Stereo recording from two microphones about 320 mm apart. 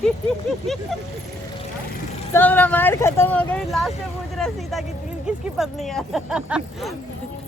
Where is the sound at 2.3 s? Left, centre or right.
Centre.